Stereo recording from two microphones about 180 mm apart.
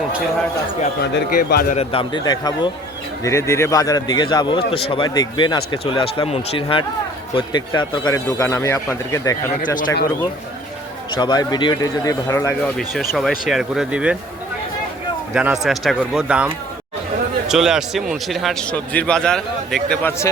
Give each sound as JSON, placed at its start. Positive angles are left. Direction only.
{"t": 1.1, "sound": "a man's voice", "side_deg": 60}
{"t": 1.7, "sound": "speech", "side_deg": 30}
{"t": 11.1, "sound": "speech", "side_deg": 25}
{"t": 12.7, "sound": "a man's voice", "side_deg": 0}
{"t": 15.3, "sound": "a man's voice", "side_deg": -5}
{"t": 17.5, "sound": "a man's voice", "side_deg": -5}